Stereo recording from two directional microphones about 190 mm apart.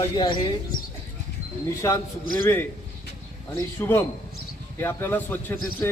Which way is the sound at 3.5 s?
10° left (ahead or behind).